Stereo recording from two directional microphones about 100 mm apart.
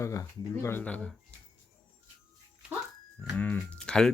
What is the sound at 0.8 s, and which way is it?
Speech, 15° left (ahead or behind).